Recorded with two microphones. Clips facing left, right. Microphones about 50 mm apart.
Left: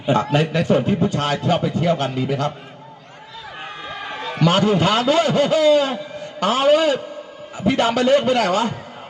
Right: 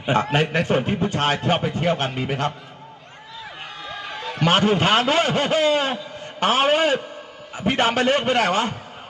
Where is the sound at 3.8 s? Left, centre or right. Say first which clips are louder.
Left 2 dB; left.